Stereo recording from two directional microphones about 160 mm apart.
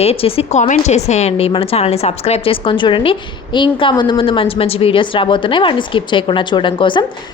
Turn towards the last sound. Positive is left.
turn(degrees=30)  # may be behind; listen again after turning